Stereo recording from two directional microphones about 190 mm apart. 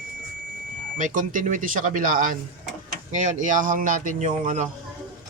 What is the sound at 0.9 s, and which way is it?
A man's voice, 45° right (ahead or behind).